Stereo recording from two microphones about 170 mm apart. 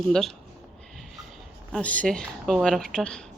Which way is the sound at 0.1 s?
Centre (ahead or behind).